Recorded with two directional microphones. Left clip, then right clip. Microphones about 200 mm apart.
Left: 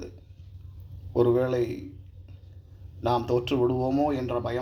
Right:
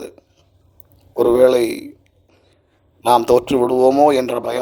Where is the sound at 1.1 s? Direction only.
60° right (ahead or behind).